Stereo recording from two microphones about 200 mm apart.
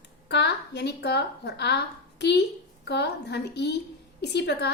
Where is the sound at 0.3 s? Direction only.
55° left (ahead or behind).